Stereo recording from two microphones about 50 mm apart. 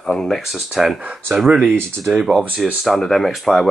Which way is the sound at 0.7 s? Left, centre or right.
Centre.